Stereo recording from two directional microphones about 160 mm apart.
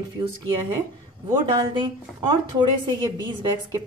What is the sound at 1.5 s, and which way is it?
A woman's voice, 30° right (ahead or behind).